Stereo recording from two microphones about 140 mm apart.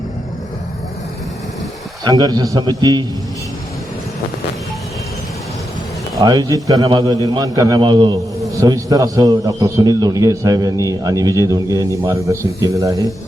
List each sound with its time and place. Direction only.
2.0 s a man's voice: 30° right (ahead or behind)
6.1 s a man's voice: 25° right (ahead or behind)